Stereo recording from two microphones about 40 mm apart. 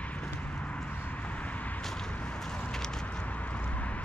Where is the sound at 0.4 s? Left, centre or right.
Left.